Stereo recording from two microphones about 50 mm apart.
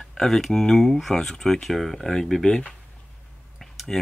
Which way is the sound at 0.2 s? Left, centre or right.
Centre.